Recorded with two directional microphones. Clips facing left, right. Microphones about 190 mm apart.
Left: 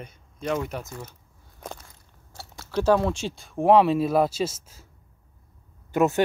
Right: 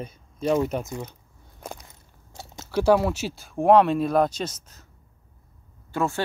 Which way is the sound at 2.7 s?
10° right (ahead or behind).